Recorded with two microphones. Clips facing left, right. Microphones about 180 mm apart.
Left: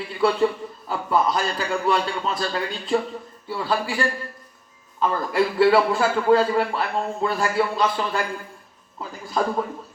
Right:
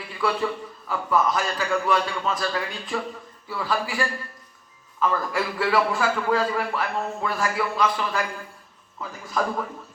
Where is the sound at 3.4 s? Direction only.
30° left (ahead or behind).